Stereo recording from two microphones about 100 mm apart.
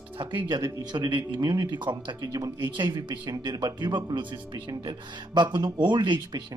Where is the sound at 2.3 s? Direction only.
35° right (ahead or behind).